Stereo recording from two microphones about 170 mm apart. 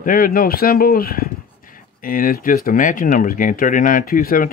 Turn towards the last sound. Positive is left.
turn(degrees=60)  # may be behind; listen again after turning